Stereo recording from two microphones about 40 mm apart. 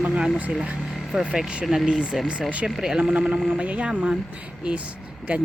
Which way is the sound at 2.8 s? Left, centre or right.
Centre.